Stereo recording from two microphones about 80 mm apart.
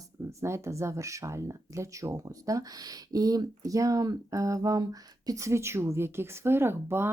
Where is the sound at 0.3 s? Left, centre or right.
Right.